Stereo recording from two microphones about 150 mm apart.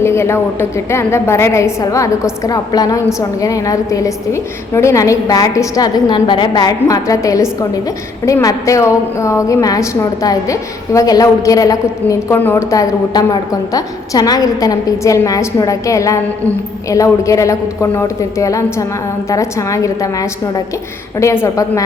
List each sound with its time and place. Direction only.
0.0 s a woman's voice: 15° left (ahead or behind)
12.7 s a woman's voice: 25° left (ahead or behind)